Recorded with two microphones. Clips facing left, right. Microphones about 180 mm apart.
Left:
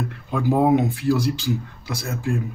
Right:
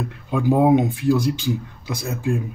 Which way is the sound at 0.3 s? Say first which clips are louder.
Right 2 dB; 15° right (ahead or behind).